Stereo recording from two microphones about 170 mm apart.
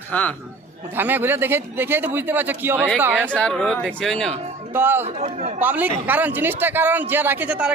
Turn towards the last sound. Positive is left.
turn(degrees=-5)  # may be behind; listen again after turning